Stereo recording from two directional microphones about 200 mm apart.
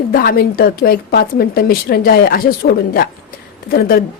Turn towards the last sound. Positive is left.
turn(degrees=50)  # may be behind; listen again after turning